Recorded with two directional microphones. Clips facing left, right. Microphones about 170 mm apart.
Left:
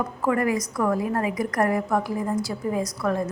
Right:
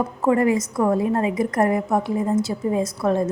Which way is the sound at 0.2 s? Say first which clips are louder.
Right 5 dB; 25° right (ahead or behind).